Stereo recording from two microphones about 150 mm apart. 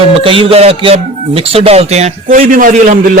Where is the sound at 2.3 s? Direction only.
65° right (ahead or behind).